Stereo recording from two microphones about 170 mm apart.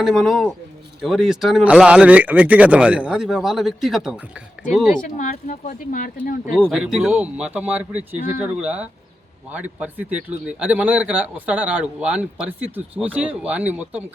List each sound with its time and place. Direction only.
0.0 s speech: centre (ahead or behind)
5.0 s speech: 50° left (ahead or behind)
6.7 s speech: 5° right (ahead or behind)